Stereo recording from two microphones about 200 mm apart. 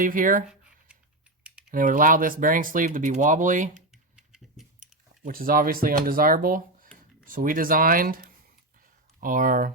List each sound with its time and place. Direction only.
0.0 s speech: 40° right (ahead or behind)
1.7 s speech: 45° right (ahead or behind)
4.3 s typing: centre (ahead or behind)
5.2 s speech: 45° right (ahead or behind)